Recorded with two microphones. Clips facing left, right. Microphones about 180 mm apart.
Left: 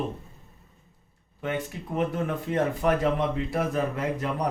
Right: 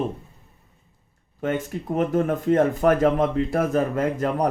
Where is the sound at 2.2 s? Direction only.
45° right (ahead or behind).